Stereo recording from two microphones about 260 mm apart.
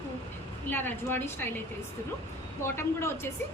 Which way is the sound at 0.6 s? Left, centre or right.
Centre.